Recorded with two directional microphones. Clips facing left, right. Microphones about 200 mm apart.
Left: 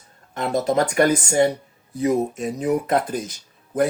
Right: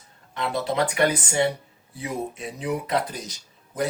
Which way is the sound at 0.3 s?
45° left (ahead or behind).